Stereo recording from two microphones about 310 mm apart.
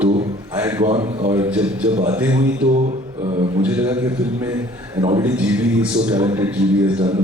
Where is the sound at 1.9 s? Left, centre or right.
Centre.